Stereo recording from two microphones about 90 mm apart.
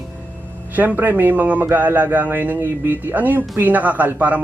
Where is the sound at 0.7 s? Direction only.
20° right (ahead or behind).